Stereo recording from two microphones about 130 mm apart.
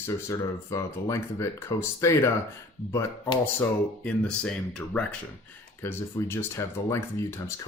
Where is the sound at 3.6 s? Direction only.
10° left (ahead or behind).